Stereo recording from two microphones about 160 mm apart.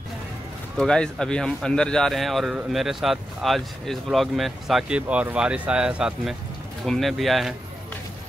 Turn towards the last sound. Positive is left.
turn(degrees=0)  # may be behind; listen again after turning